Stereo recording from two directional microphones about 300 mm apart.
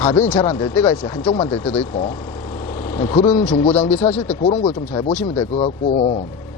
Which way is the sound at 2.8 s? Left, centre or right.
Centre.